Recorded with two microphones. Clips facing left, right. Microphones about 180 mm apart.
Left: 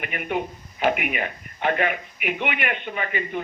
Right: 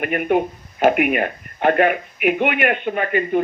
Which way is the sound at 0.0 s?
45° right (ahead or behind).